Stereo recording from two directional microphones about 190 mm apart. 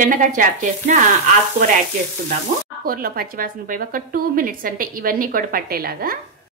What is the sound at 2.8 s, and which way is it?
A woman's voice, 50° right (ahead or behind).